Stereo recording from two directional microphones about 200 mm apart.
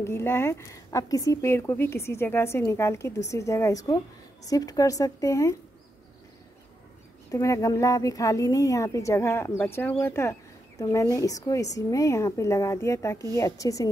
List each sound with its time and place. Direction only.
0.0 s a woman's voice: 10° left (ahead or behind)
7.2 s a woman's voice: 15° left (ahead or behind)